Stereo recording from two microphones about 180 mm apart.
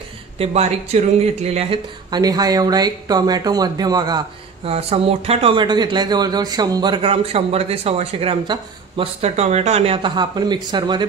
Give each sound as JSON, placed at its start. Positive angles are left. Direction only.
{"t": 0.4, "sound": "speech", "side_deg": -35}
{"t": 4.6, "sound": "speech", "side_deg": -35}